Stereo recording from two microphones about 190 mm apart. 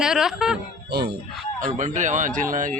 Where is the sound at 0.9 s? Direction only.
55° right (ahead or behind).